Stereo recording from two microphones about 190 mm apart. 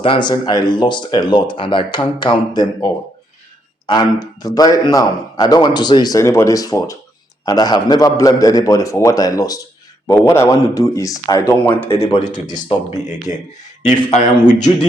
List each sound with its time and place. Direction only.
0.0 s a man's voice: 25° left (ahead or behind)
11.9 s speech: 30° left (ahead or behind)